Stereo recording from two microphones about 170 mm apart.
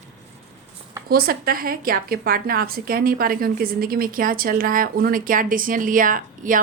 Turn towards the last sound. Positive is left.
turn(degrees=-50)  # may be behind; listen again after turning